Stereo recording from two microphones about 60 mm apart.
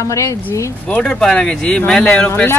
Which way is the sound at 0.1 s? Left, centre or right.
Left.